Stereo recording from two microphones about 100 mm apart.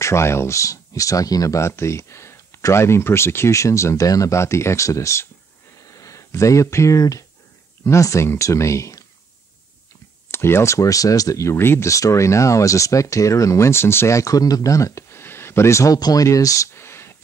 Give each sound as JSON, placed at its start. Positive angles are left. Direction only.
{"t": 0.0, "sound": "speech", "side_deg": 25}
{"t": 5.8, "sound": "a sound", "side_deg": 35}
{"t": 7.8, "sound": "speech", "side_deg": 30}
{"t": 10.3, "sound": "speech", "side_deg": 25}